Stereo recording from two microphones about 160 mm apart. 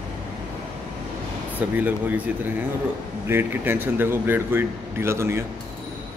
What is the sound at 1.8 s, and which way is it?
Speech, 10° right (ahead or behind).